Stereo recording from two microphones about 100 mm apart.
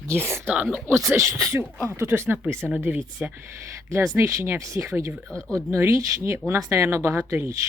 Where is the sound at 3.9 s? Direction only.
25° right (ahead or behind).